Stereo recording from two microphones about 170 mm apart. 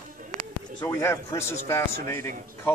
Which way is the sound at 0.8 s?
15° left (ahead or behind).